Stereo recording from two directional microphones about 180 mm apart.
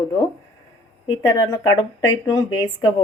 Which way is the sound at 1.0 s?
25° left (ahead or behind).